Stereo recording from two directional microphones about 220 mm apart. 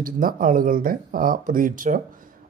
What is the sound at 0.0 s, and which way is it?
Speech, 40° right (ahead or behind).